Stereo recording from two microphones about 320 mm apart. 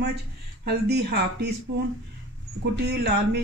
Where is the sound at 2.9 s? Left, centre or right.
Right.